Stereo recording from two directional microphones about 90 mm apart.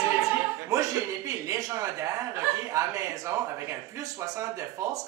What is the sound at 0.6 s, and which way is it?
Speech, 40° right (ahead or behind).